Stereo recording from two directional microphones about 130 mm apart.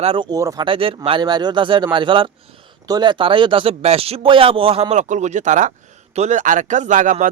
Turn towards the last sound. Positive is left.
turn(degrees=-85)